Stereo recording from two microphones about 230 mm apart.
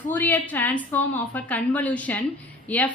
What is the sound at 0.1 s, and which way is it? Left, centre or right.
A woman's voice, centre.